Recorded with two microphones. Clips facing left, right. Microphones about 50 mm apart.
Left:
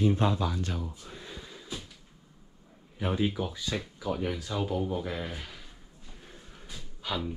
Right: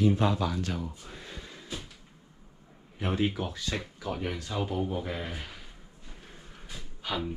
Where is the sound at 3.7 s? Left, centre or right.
Right.